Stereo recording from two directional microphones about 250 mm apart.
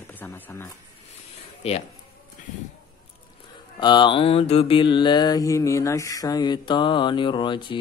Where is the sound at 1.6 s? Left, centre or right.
Left.